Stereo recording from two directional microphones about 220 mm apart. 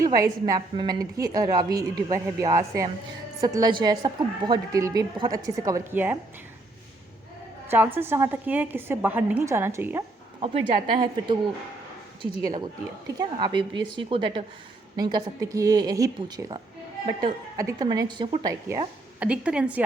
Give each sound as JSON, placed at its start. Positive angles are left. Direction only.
{"t": 0.0, "sound": "a woman's voice", "side_deg": -15}
{"t": 7.7, "sound": "a woman's voice", "side_deg": -10}
{"t": 10.4, "sound": "a woman's voice", "side_deg": -25}
{"t": 19.2, "sound": "a woman's voice", "side_deg": -5}